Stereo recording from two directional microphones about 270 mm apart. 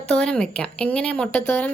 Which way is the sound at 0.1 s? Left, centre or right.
Centre.